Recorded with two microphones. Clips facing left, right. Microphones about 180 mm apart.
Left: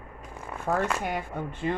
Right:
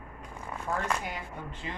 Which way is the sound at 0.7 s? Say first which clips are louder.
Left 6 dB; 60° left (ahead or behind).